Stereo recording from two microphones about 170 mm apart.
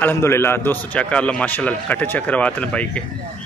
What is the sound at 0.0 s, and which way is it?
A man's voice, 15° left (ahead or behind).